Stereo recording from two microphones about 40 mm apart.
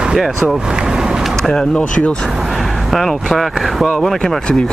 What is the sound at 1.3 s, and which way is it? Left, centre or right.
Speech, centre.